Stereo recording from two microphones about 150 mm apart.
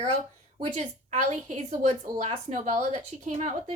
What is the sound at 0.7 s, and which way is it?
Speech, 50° right (ahead or behind).